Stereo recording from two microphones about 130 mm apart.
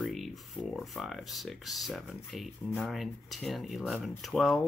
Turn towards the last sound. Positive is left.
turn(degrees=5)  # may be behind; listen again after turning